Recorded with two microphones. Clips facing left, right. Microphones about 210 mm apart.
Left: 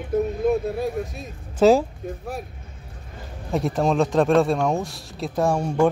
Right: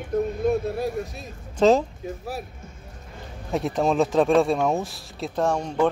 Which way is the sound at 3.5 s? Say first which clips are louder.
Left 1 dB; centre (ahead or behind).